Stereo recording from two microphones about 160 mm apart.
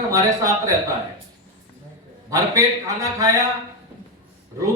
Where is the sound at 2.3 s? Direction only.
20° right (ahead or behind).